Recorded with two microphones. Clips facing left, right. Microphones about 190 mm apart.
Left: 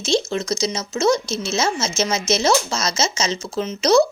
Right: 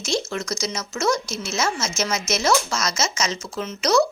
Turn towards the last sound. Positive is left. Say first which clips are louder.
# left 4 dB
turn(degrees=25)  # may be behind; listen again after turning